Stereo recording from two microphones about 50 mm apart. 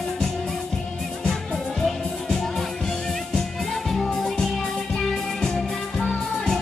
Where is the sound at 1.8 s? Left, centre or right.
Centre.